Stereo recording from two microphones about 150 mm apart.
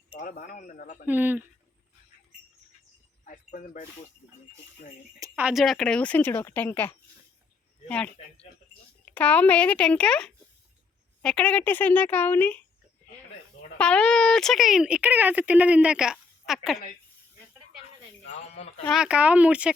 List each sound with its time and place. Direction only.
0.2 s speech: 65° left (ahead or behind)
1.0 s speech: 10° right (ahead or behind)
3.2 s speech: 60° left (ahead or behind)
5.3 s a woman's voice: 5° right (ahead or behind); by 12.6 s 10° left (ahead or behind)
13.7 s speech: 5° left (ahead or behind)
18.9 s speech: 5° right (ahead or behind)